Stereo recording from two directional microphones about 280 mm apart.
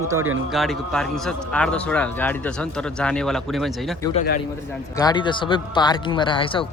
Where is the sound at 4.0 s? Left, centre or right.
Centre.